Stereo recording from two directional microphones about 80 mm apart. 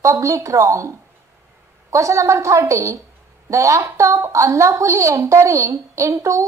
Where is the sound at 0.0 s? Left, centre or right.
Right.